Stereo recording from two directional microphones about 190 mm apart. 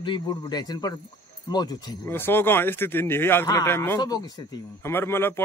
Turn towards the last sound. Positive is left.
turn(degrees=10)  # may be behind; listen again after turning